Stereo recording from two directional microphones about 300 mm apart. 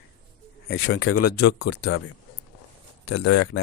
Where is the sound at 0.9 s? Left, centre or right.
Left.